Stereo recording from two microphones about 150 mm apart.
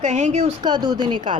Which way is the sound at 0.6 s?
30° right (ahead or behind).